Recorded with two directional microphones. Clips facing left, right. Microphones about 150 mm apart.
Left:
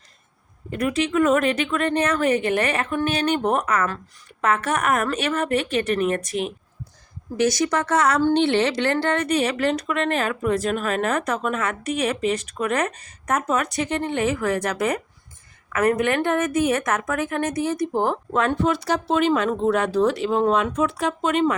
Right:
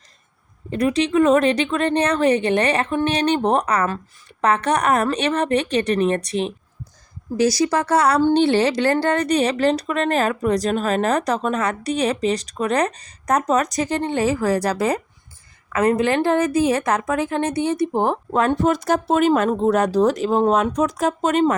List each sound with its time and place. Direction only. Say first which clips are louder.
0.7 s a woman's voice: right 4 dB; 35° right (ahead or behind)